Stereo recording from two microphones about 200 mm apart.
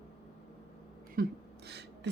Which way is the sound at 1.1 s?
50° right (ahead or behind).